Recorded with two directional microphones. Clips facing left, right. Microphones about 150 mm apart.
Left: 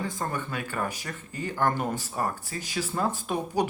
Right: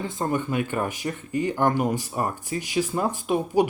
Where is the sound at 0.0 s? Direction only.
20° right (ahead or behind).